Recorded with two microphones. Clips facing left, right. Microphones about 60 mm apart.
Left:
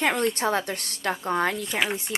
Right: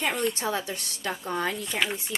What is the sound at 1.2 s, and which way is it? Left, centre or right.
Speech, left.